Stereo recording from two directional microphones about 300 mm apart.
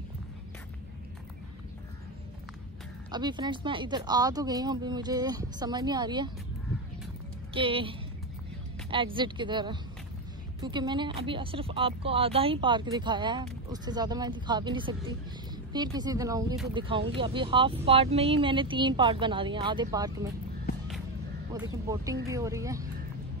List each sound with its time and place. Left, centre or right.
3.1 s speech: centre
7.5 s speech: centre
8.9 s speech: centre
21.8 s speech: centre